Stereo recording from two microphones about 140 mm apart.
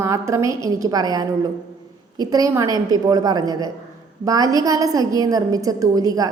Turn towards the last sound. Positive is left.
turn(degrees=-25)  # may be behind; listen again after turning